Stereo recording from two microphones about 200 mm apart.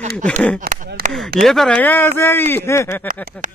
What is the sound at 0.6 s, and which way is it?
Chop, 45° right (ahead or behind).